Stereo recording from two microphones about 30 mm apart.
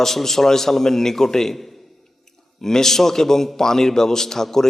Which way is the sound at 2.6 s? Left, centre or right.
Centre.